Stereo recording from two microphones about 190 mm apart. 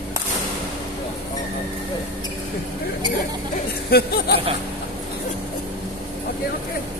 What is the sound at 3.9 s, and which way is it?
Speech, 55° left (ahead or behind).